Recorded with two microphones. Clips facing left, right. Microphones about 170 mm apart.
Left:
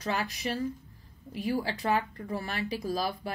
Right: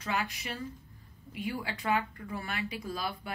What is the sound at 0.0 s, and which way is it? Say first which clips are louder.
Speech: left 3 dB; 35° left (ahead or behind).